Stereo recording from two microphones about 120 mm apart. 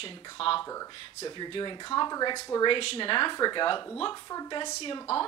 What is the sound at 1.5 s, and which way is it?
Speech, 40° left (ahead or behind).